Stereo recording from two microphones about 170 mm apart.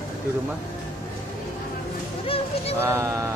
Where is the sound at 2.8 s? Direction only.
15° right (ahead or behind).